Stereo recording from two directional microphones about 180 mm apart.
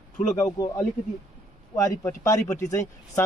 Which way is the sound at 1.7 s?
15° left (ahead or behind).